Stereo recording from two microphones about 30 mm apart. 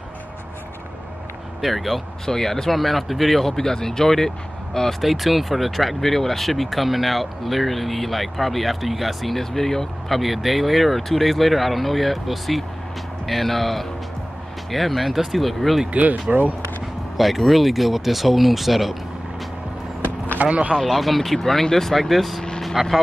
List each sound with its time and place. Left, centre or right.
1.6 s speech: centre
2.2 s speech: centre
5.0 s speech: centre
9.3 s speech: centre
10.1 s speech: centre
16.3 s speech: right
17.2 s speech: centre
20.4 s speech: right
20.7 s speech: centre
22.8 s speech: centre